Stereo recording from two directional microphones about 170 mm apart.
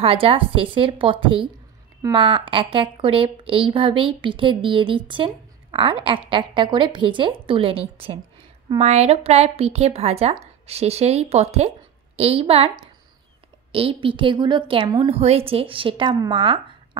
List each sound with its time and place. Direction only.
0.0 s a woman's voice: 35° right (ahead or behind)